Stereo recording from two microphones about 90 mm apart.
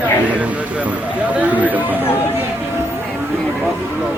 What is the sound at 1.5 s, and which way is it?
Speech, 15° right (ahead or behind).